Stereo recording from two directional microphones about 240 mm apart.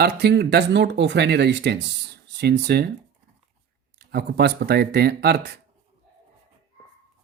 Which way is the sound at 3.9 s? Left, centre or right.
Right.